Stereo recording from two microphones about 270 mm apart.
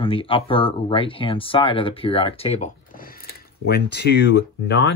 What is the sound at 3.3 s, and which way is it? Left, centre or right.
Speech, left.